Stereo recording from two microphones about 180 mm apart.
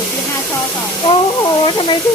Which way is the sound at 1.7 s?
25° left (ahead or behind).